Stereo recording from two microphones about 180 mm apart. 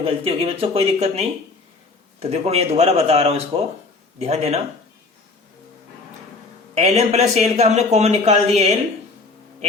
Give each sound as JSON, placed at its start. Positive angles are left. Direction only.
{"t": 0.0, "sound": "a man's voice", "side_deg": -30}
{"t": 6.7, "sound": "a man's voice", "side_deg": -35}